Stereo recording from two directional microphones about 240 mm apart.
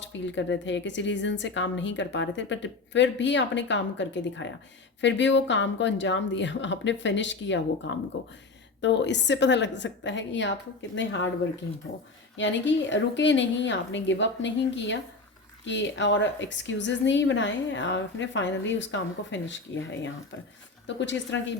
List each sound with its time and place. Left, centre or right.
0.0 s a woman's voice: left
12.4 s a woman's voice: left